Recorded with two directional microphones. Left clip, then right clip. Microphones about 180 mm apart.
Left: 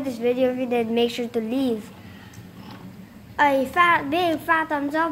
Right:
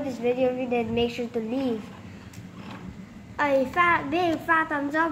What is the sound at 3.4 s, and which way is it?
A child's voice, 50° left (ahead or behind).